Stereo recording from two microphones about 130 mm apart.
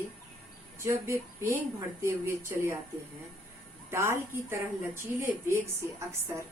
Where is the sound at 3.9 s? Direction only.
20° right (ahead or behind).